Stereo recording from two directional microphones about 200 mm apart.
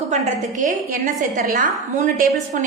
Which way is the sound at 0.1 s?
40° right (ahead or behind).